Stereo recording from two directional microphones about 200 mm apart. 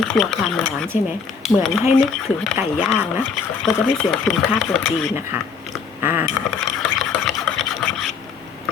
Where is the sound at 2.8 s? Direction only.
Centre (ahead or behind).